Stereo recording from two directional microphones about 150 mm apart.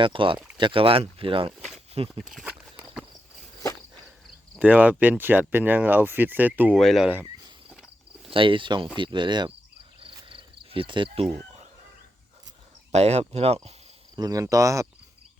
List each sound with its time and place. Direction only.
0.0 s speech: 35° right (ahead or behind)
2.2 s speech: 5° right (ahead or behind)
4.6 s speech: 10° right (ahead or behind)
6.7 s speech: centre (ahead or behind)
8.3 s speech: 35° right (ahead or behind)
10.0 s cricket: 35° right (ahead or behind)
12.9 s speech: 45° right (ahead or behind)
14.2 s speech: 25° right (ahead or behind)